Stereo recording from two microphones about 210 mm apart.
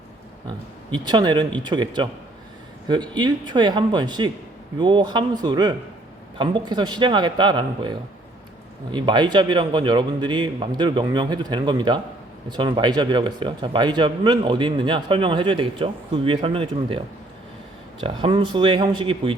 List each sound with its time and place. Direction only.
0.9 s speech: 20° right (ahead or behind)
18.0 s speech: 25° right (ahead or behind)